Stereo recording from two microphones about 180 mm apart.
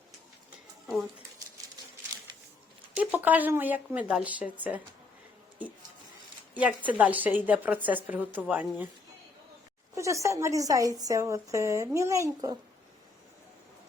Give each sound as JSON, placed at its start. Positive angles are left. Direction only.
{"t": 2.9, "sound": "a woman's voice", "side_deg": -10}
{"t": 6.5, "sound": "a woman's voice", "side_deg": -10}
{"t": 9.9, "sound": "a woman's voice", "side_deg": -15}